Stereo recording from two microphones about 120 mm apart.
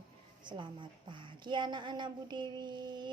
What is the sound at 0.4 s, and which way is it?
A woman's voice, 40° right (ahead or behind).